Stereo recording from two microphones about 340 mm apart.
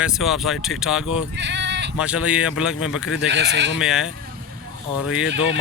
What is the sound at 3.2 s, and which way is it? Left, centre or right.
Speech, right.